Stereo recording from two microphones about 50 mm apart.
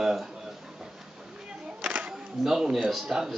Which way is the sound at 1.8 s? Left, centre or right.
Right.